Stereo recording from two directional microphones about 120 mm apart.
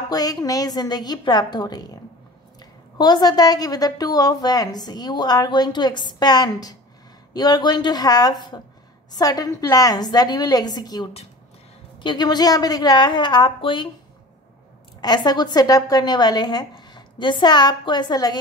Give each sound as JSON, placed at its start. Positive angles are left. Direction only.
{"t": 0.1, "sound": "a woman's voice", "side_deg": 30}
{"t": 3.0, "sound": "a woman's voice", "side_deg": 35}
{"t": 15.0, "sound": "a woman's voice", "side_deg": 35}